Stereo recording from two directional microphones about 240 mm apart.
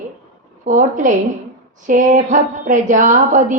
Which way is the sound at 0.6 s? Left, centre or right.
Right.